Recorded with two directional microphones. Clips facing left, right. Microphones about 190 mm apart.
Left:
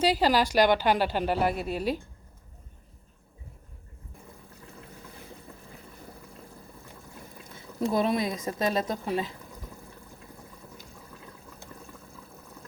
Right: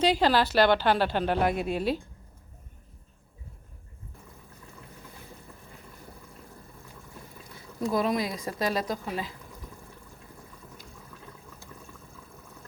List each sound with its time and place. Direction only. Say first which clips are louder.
0.0 s a woman's voice: even; 10° left (ahead or behind)
7.5 s speech: left 1 dB; 25° left (ahead or behind)